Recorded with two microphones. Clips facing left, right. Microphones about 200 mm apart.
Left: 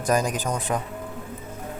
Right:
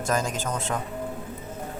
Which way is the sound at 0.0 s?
15° left (ahead or behind).